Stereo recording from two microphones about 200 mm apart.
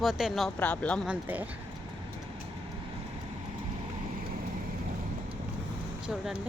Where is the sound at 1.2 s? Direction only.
10° right (ahead or behind).